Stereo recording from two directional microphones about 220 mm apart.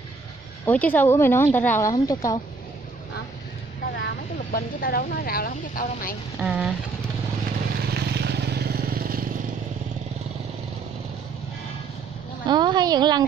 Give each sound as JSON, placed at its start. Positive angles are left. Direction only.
{"t": 0.7, "sound": "speech", "side_deg": 5}
{"t": 3.9, "sound": "speech", "side_deg": 45}
{"t": 6.4, "sound": "speech", "side_deg": -5}
{"t": 7.9, "sound": "vehicle", "side_deg": -45}
{"t": 12.4, "sound": "a woman's voice", "side_deg": -20}